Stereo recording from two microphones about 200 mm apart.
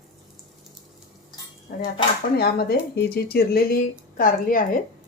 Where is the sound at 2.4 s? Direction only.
50° left (ahead or behind).